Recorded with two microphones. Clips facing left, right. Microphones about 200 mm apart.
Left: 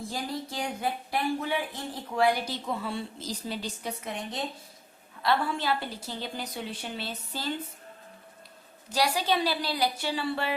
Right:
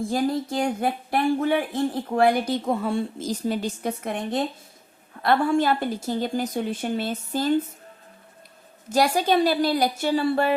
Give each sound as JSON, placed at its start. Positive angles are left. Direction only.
{"t": 0.1, "sound": "speech", "side_deg": -50}
{"t": 8.9, "sound": "speech", "side_deg": -50}